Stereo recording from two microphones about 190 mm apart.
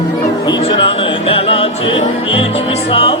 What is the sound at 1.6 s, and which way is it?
Music, 30° left (ahead or behind).